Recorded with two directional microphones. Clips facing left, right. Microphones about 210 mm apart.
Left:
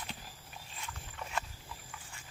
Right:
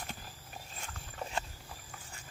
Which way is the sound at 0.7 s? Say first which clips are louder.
Right 2 dB; 45° right (ahead or behind).